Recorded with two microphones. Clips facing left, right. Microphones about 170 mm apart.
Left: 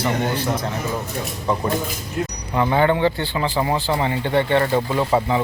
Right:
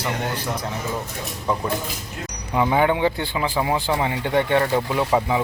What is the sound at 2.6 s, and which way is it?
Speech, 10° right (ahead or behind).